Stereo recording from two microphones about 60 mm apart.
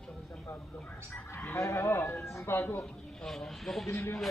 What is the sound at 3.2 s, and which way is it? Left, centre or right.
Speech, centre.